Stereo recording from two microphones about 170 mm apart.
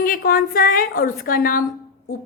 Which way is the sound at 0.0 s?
65° left (ahead or behind).